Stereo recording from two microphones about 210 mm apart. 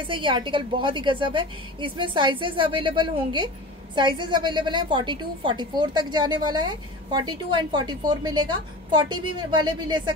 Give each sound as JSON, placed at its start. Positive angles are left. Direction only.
{"t": 0.0, "sound": "a woman's voice", "side_deg": -25}